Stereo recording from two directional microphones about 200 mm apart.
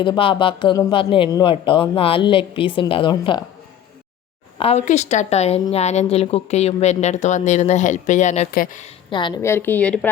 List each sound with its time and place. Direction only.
0.0 s speech: 25° left (ahead or behind)
4.5 s speech: 30° left (ahead or behind)
9.0 s a woman's voice: 25° left (ahead or behind); by 10.1 s 5° left (ahead or behind)